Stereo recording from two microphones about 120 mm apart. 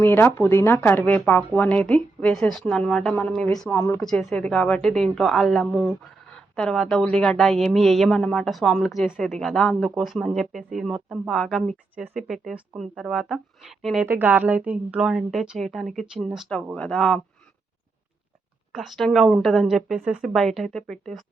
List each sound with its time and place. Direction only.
0.0 s a woman's voice: 20° left (ahead or behind)
3.7 s speech: 20° left (ahead or behind); by 14.1 s 5° right (ahead or behind)
14.1 s speech: 15° right (ahead or behind)
16.7 s a woman's voice: 10° left (ahead or behind)
18.7 s speech: centre (ahead or behind)